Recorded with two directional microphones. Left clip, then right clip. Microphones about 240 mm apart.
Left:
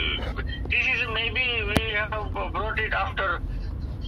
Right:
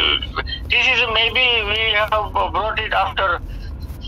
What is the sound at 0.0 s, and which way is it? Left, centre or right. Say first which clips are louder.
Music: right 10 dB; right.